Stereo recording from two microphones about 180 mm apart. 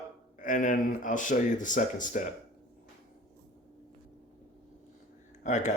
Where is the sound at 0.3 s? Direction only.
45° left (ahead or behind).